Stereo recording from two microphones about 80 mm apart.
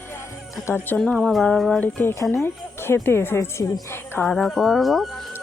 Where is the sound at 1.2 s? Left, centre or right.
Centre.